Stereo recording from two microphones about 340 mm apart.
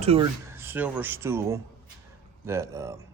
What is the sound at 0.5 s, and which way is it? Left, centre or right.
Speech, centre.